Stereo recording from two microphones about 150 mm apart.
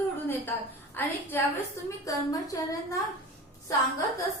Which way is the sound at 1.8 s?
25° left (ahead or behind).